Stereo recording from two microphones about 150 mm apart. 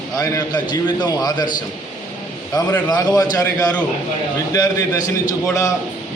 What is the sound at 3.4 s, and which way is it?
Speech, 10° left (ahead or behind).